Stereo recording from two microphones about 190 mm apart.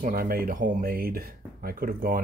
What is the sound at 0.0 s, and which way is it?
Speech, 50° right (ahead or behind).